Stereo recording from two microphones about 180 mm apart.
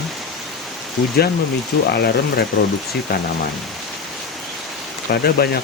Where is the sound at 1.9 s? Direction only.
65° left (ahead or behind).